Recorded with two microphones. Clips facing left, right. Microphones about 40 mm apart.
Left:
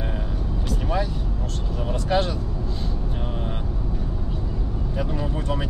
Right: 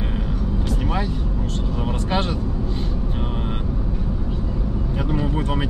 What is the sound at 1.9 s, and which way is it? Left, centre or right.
Speech, right.